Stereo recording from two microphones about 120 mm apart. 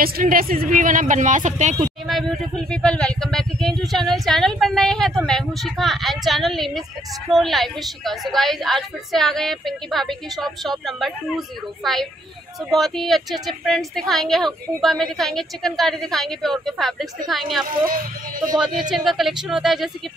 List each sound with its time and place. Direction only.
0.2 s speech: 90° right
2.0 s a woman's voice: centre (ahead or behind)